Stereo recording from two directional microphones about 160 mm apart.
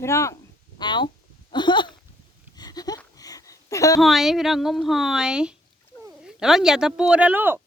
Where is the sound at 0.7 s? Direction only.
30° left (ahead or behind).